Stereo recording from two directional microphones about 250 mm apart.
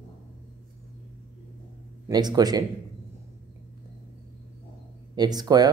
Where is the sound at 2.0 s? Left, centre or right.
Centre.